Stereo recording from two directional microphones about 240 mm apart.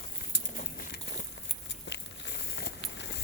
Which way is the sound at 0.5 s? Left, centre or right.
Left.